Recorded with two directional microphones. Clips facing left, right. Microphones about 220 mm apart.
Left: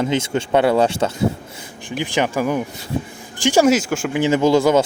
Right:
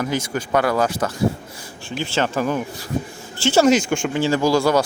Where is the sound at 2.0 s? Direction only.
15° left (ahead or behind).